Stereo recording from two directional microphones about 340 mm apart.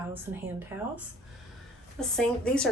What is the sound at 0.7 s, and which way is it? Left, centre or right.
Speech, centre.